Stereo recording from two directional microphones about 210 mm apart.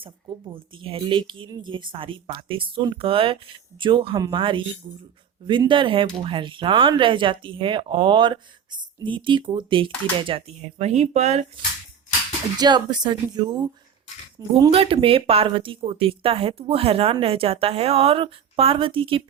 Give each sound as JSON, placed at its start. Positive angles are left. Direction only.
{"t": 0.0, "sound": "speech", "side_deg": -25}
{"t": 12.5, "sound": "speech", "side_deg": -20}